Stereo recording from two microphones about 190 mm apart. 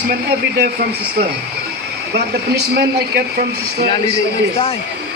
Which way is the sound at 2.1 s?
60° right (ahead or behind).